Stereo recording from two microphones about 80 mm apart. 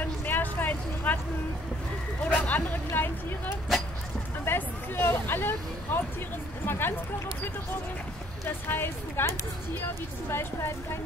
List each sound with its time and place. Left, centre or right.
0.0 s a sound: left
2.2 s speech: centre
8.5 s speech: left
10.3 s a woman's voice: left